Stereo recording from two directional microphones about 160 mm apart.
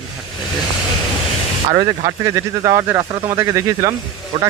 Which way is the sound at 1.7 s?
25° right (ahead or behind).